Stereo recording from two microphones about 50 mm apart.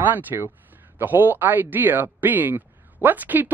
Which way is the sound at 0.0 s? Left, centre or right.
Right.